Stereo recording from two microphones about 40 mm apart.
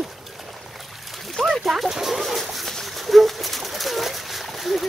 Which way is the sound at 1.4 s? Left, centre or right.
Centre.